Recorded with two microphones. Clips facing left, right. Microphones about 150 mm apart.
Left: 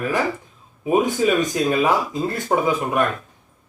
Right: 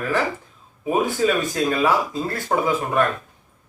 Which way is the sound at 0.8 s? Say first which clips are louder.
Left 2 dB; 15° left (ahead or behind).